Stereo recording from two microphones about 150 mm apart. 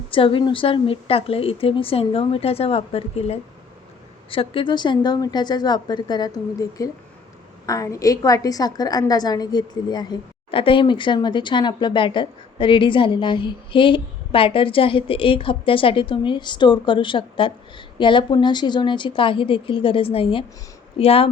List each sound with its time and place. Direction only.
0.1 s a woman's voice: 35° left (ahead or behind)